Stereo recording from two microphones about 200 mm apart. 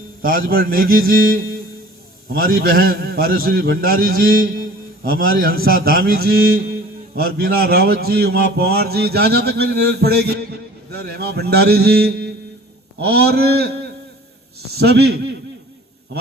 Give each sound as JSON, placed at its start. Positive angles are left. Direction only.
{"t": 0.2, "sound": "a man's voice", "side_deg": -45}